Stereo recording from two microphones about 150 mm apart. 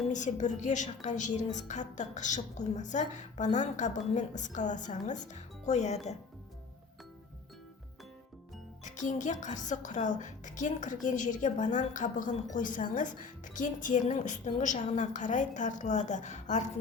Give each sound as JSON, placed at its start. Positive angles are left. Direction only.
{"t": 0.1, "sound": "a woman's voice", "side_deg": 55}
{"t": 8.8, "sound": "a woman's voice", "side_deg": 55}